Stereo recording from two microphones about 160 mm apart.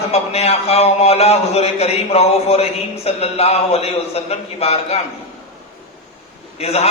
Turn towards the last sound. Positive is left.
turn(degrees=40)  # may be behind; listen again after turning